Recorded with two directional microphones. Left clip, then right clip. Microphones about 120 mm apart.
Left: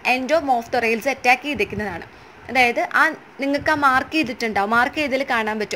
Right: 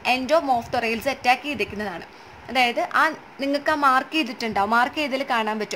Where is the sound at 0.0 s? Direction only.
15° left (ahead or behind).